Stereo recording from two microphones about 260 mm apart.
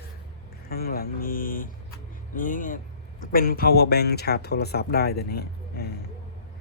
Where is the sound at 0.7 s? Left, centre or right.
Left.